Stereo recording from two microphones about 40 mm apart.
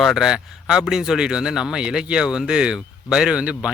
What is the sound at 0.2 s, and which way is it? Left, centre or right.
Speech, centre.